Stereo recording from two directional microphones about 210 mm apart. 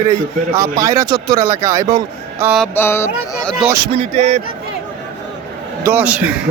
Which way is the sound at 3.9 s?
35° right (ahead or behind).